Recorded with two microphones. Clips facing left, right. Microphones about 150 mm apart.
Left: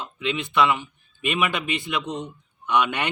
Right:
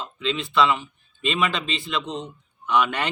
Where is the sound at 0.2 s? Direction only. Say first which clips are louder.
Even; 15° left (ahead or behind).